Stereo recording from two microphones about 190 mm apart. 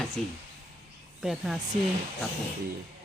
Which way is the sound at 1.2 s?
Centre (ahead or behind).